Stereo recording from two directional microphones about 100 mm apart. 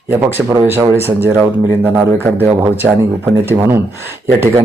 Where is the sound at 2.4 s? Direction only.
20° right (ahead or behind).